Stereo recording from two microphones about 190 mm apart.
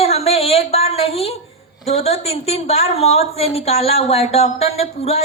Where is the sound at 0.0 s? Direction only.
30° left (ahead or behind).